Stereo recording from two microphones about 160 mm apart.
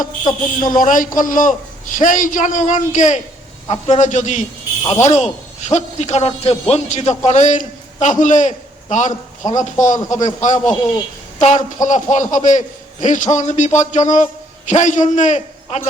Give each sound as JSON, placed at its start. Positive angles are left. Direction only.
{"t": 0.3, "sound": "speech", "side_deg": 25}
{"t": 0.8, "sound": "a man's voice", "side_deg": 55}
{"t": 4.8, "sound": "speech", "side_deg": 20}
{"t": 5.0, "sound": "a man's voice", "side_deg": 45}